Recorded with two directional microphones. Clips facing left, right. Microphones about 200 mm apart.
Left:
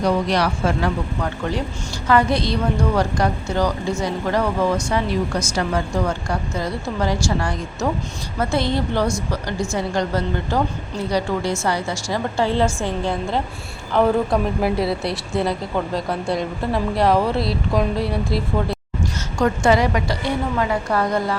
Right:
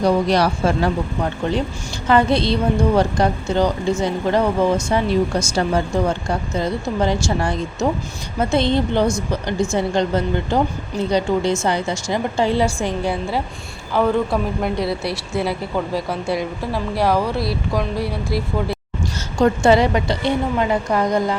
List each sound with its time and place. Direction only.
0.0 s a woman's voice: 30° right (ahead or behind); by 13.4 s 10° right (ahead or behind)
13.9 s speech: centre (ahead or behind)
19.4 s speech: 25° right (ahead or behind)